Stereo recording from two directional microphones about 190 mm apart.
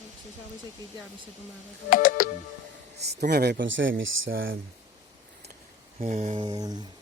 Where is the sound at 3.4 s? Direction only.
70° right (ahead or behind).